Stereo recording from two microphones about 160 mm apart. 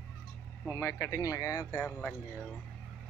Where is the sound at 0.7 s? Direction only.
15° left (ahead or behind).